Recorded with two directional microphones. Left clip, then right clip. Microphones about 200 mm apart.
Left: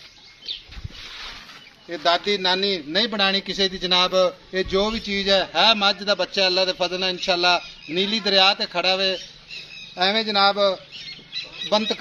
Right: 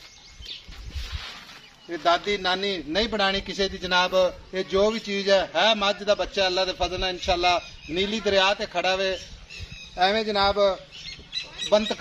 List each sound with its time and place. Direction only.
1.9 s speech: 45° left (ahead or behind)